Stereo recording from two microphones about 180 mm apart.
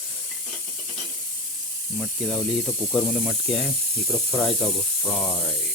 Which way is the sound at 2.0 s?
Centre (ahead or behind).